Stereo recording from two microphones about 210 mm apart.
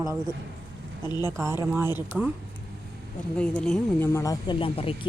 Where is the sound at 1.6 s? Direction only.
10° right (ahead or behind).